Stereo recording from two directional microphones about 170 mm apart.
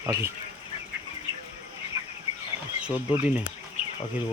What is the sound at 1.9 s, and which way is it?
Chicken, 20° right (ahead or behind).